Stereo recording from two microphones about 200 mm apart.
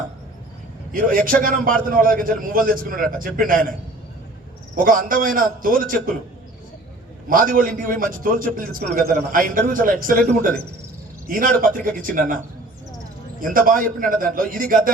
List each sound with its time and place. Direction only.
0.9 s a man's voice: 45° right (ahead or behind)
4.8 s a man's voice: 45° right (ahead or behind)
7.3 s a man's voice: 45° right (ahead or behind)
13.4 s a man's voice: 45° right (ahead or behind)